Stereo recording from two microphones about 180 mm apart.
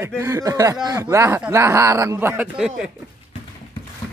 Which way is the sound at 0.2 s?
15° right (ahead or behind).